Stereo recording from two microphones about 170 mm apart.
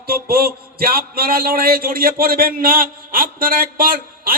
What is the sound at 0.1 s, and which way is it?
A man's voice, 60° right (ahead or behind).